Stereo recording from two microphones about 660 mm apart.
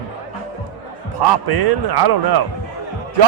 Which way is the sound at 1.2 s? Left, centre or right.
Right.